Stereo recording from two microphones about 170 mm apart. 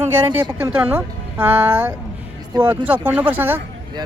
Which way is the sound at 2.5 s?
25° right (ahead or behind).